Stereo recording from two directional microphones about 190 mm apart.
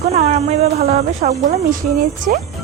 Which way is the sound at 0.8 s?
50° right (ahead or behind).